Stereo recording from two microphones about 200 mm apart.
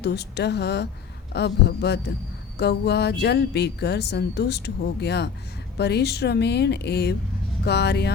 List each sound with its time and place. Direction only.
0.0 s speech: 55° left (ahead or behind)